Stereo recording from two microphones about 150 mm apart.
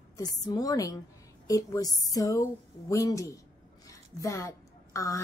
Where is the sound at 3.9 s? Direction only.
20° left (ahead or behind).